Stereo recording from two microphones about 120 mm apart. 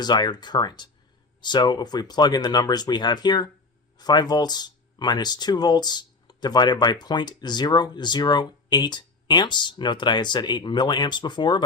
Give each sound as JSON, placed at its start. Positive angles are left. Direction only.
{"t": 0.0, "sound": "speech", "side_deg": 35}